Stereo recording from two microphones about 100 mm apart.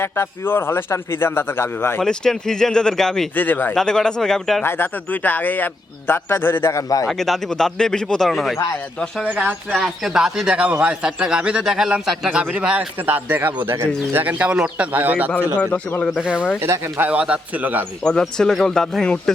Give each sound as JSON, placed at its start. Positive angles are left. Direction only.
{"t": 0.0, "sound": "a man's voice", "side_deg": 25}
{"t": 2.0, "sound": "speech", "side_deg": 5}
{"t": 3.3, "sound": "a man's voice", "side_deg": 20}
{"t": 3.8, "sound": "speech", "side_deg": 5}
{"t": 4.6, "sound": "a man's voice", "side_deg": 20}
{"t": 6.7, "sound": "speech", "side_deg": 35}
{"t": 7.1, "sound": "speech", "side_deg": 5}
{"t": 9.7, "sound": "a man's voice", "side_deg": 0}
{"t": 15.7, "sound": "speech", "side_deg": 15}
{"t": 16.2, "sound": "a man's voice", "side_deg": -10}
{"t": 16.6, "sound": "speech", "side_deg": -25}
{"t": 17.1, "sound": "a man's voice", "side_deg": -10}
{"t": 18.0, "sound": "speech", "side_deg": 10}